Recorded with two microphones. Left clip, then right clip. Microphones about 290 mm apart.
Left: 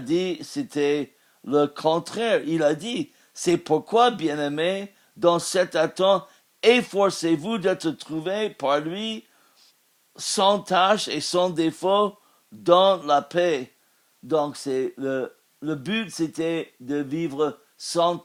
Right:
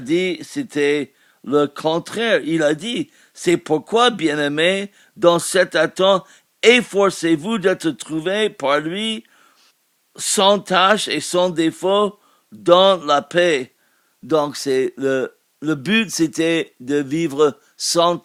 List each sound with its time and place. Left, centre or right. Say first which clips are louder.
0.0 s speech: right 5 dB; right